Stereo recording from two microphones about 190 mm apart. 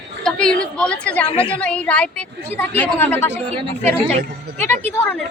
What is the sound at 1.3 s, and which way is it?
Speech, 30° left (ahead or behind).